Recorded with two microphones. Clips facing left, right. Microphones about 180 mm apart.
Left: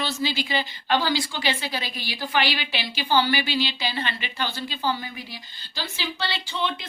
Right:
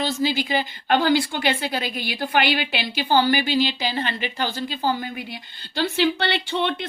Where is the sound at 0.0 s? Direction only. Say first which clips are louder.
Right 4 dB; 45° right (ahead or behind).